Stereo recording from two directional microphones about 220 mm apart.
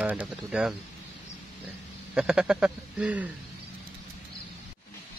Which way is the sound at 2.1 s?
5° right (ahead or behind).